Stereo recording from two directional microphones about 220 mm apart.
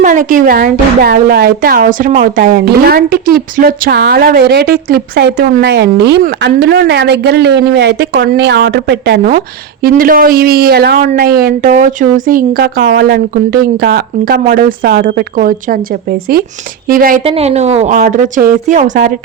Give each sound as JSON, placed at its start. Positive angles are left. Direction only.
{"t": 0.0, "sound": "a woman's voice", "side_deg": -35}
{"t": 16.9, "sound": "a woman's voice", "side_deg": -40}
{"t": 17.2, "sound": "a woman's voice", "side_deg": -30}